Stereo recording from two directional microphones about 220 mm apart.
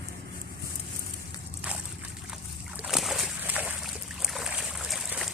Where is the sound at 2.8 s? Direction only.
Centre (ahead or behind).